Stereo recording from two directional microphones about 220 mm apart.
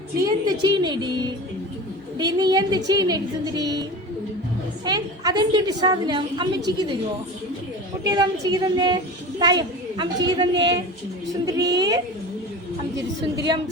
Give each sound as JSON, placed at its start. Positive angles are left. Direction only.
{"t": 0.2, "sound": "a woman's voice", "side_deg": -20}
{"t": 4.9, "sound": "a woman's voice", "side_deg": -20}
{"t": 8.0, "sound": "a woman's voice", "side_deg": -20}
{"t": 13.3, "sound": "a woman's voice", "side_deg": -20}